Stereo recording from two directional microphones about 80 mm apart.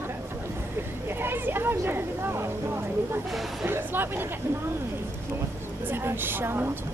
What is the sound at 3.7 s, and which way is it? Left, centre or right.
Speech, right.